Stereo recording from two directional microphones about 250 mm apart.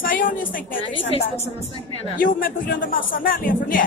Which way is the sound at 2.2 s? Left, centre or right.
Left.